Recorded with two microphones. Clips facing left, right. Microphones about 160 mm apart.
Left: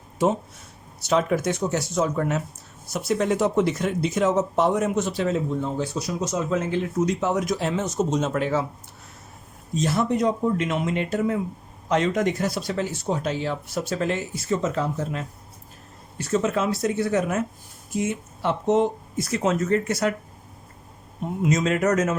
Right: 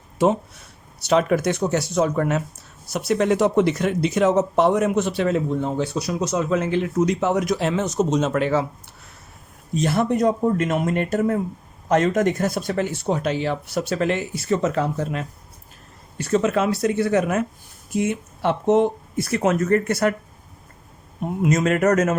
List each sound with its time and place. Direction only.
0.9 s speech: 70° right (ahead or behind)
9.7 s speech: 60° right (ahead or behind)
21.4 s speech: 60° right (ahead or behind)